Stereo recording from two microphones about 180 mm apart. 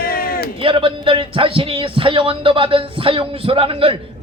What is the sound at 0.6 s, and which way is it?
A man's voice, 30° right (ahead or behind).